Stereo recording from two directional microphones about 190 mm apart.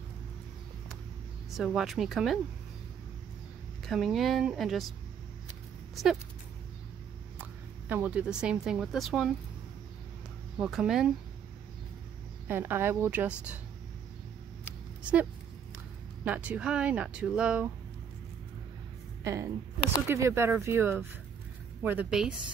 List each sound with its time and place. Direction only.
1.5 s speech: centre (ahead or behind)
3.8 s speech: centre (ahead or behind)
7.9 s speech: 10° right (ahead or behind)
10.6 s speech: 5° right (ahead or behind)
12.4 s speech: 10° right (ahead or behind)
16.3 s speech: 5° right (ahead or behind)
19.2 s speech: 15° right (ahead or behind)